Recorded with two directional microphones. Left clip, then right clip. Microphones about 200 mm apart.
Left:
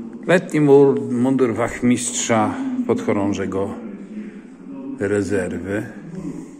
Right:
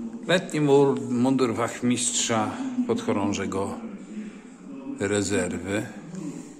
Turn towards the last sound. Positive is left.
turn(degrees=-20)  # may be behind; listen again after turning